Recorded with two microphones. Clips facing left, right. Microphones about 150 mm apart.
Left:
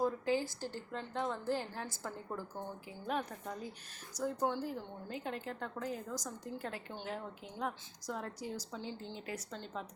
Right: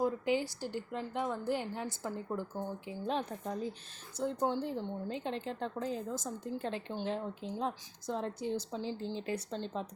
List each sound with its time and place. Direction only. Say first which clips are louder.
0.0 s a sound: right 2 dB; 15° right (ahead or behind)
0.6 s a woman's voice: right 4 dB; 15° right (ahead or behind)
3.1 s a woman's voice: right 2 dB; 25° right (ahead or behind)